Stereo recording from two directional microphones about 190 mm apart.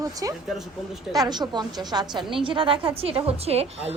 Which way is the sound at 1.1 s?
20° right (ahead or behind).